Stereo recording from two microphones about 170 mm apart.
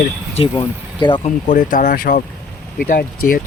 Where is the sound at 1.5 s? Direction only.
50° left (ahead or behind).